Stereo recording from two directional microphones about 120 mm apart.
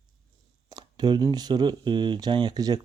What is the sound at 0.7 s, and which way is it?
Speech, 35° right (ahead or behind).